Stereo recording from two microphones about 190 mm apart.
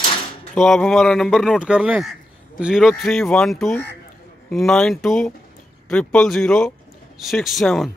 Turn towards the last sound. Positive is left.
turn(degrees=0)  # may be behind; listen again after turning